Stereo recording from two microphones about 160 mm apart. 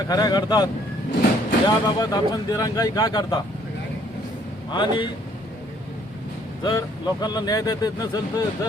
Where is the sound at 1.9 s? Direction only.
25° left (ahead or behind).